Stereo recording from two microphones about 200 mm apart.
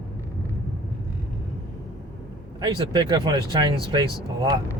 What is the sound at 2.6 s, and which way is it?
Speech, 20° right (ahead or behind).